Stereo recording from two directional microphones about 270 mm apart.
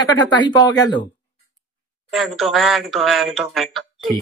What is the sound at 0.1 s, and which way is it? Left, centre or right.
Speech, centre.